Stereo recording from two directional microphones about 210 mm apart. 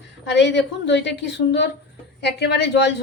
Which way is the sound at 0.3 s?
55° left (ahead or behind).